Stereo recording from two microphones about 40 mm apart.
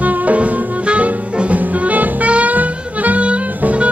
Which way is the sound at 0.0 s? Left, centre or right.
Right.